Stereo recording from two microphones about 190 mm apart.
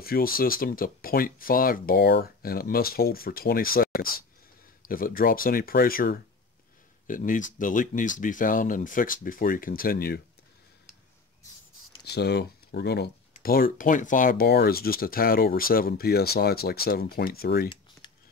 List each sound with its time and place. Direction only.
0.0 s speech: 50° left (ahead or behind)
12.0 s speech: 60° left (ahead or behind)
18.0 s a sound: 25° left (ahead or behind)